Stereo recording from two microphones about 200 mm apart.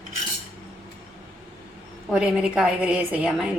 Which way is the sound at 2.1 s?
5° right (ahead or behind).